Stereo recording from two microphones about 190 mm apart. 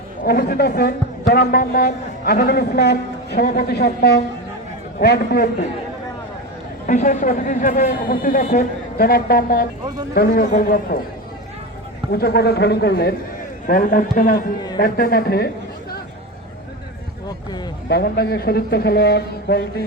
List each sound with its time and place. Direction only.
0.3 s a woman's voice: 55° left (ahead or behind)
6.8 s a man's voice: 40° left (ahead or behind)
12.1 s a woman's voice: 55° left (ahead or behind)
17.8 s a woman's voice: 55° left (ahead or behind)